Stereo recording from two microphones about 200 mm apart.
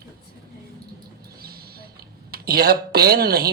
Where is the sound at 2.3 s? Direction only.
50° right (ahead or behind).